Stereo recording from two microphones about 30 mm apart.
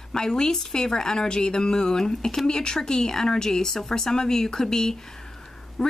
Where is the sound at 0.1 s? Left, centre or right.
Left.